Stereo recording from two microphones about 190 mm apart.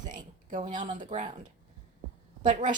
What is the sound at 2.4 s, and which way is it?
Speech, 40° right (ahead or behind).